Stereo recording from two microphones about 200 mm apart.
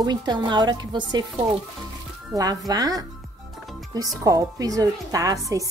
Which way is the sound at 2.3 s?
20° right (ahead or behind).